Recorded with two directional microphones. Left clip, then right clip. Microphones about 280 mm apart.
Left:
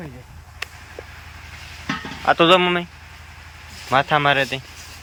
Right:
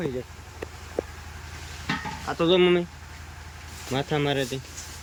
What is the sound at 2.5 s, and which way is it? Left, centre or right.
Speech, centre.